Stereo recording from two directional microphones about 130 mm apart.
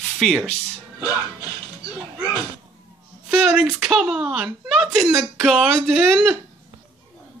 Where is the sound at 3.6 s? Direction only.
5° right (ahead or behind).